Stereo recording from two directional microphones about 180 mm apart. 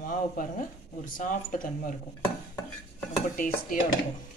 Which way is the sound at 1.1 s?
50° left (ahead or behind).